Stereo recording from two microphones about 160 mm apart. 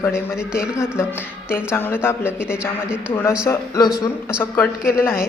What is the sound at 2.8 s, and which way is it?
Speech, 5° right (ahead or behind).